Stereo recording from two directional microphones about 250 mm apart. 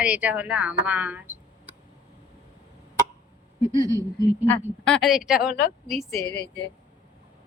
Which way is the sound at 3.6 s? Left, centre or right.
Centre.